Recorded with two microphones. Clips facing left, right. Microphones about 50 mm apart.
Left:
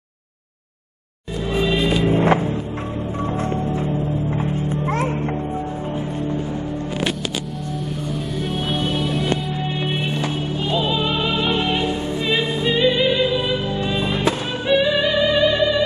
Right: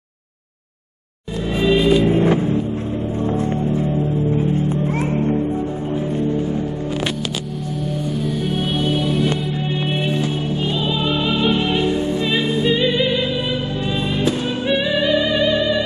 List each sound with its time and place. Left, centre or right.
1.6 s music: centre
2.0 s vehicle: left
4.4 s music: left
10.7 s music: centre